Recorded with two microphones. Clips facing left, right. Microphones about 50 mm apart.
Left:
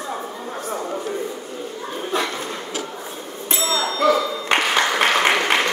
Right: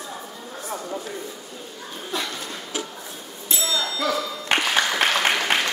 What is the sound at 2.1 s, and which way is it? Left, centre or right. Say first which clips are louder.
Dog: left 6 dB; left.